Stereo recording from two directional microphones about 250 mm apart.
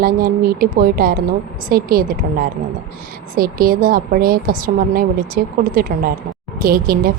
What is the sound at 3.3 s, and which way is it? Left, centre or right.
A woman's voice, right.